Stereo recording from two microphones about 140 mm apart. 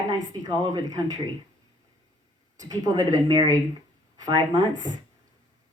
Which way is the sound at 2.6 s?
25° right (ahead or behind).